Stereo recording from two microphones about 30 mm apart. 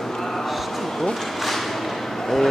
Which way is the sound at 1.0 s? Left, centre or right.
Centre.